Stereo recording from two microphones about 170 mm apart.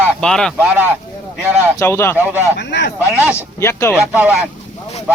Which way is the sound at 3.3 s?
15° left (ahead or behind).